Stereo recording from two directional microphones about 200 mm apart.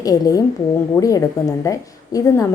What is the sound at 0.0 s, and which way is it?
A woman's voice, 20° left (ahead or behind).